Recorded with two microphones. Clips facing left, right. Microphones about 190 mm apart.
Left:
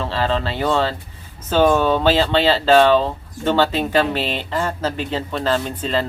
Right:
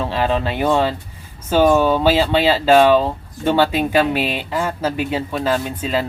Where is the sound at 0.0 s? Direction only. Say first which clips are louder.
Right 2 dB; 15° right (ahead or behind).